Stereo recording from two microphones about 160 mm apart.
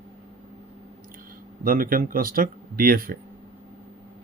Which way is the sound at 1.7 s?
60° right (ahead or behind).